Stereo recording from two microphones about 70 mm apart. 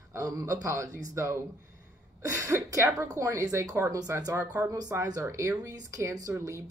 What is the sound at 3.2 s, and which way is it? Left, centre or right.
A man's voice, right.